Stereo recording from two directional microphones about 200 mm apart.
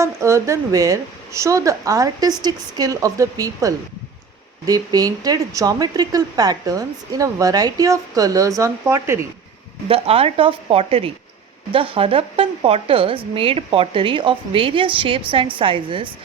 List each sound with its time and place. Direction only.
0.0 s speech: 15° right (ahead or behind)
9.9 s speech: 30° right (ahead or behind)